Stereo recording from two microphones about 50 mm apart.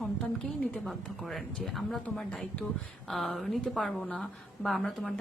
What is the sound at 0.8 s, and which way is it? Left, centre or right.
A woman's voice, centre.